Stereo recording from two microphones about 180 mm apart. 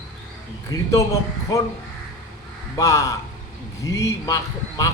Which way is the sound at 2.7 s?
15° left (ahead or behind).